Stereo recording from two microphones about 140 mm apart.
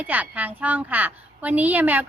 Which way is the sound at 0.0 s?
10° right (ahead or behind).